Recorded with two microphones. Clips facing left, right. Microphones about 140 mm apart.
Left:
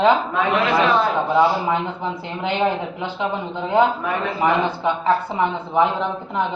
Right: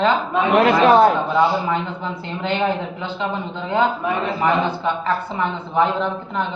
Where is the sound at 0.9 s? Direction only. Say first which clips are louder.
Right 6 dB; 45° right (ahead or behind).